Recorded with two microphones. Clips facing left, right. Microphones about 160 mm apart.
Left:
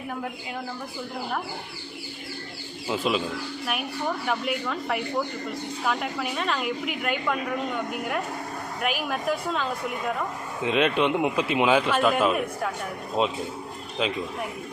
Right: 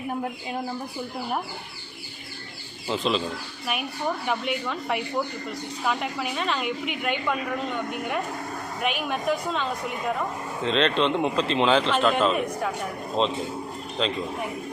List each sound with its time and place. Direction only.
0.1 s speech: 30° right (ahead or behind)
2.8 s a man's voice: 5° left (ahead or behind)
4.3 s a woman's voice: centre (ahead or behind)